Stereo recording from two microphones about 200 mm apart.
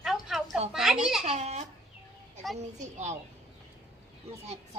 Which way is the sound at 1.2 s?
35° right (ahead or behind).